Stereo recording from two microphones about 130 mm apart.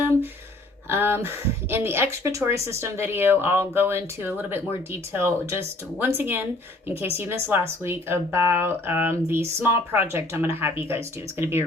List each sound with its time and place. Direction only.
0.9 s speech: 20° right (ahead or behind)